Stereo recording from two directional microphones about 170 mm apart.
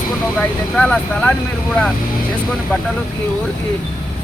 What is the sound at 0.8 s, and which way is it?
Speech, 5° left (ahead or behind).